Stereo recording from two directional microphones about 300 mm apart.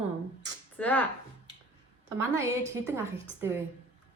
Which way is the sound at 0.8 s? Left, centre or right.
Centre.